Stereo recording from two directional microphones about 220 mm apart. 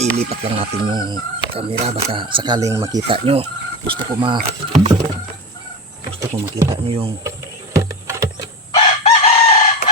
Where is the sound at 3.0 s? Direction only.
25° right (ahead or behind).